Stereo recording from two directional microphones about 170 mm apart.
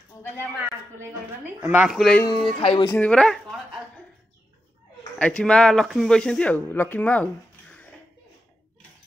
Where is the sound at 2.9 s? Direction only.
5° left (ahead or behind).